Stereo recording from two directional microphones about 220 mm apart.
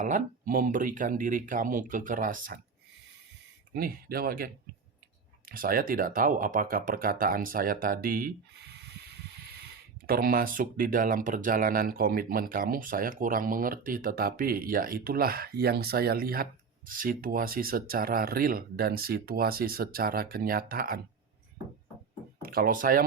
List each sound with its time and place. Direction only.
0.0 s speech: 40° right (ahead or behind)
3.8 s speech: 40° right (ahead or behind)
22.4 s speech: 45° right (ahead or behind)